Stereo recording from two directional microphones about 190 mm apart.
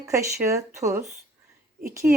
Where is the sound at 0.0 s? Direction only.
15° right (ahead or behind).